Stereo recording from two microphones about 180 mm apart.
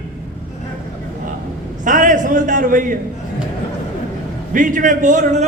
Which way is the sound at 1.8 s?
45° right (ahead or behind).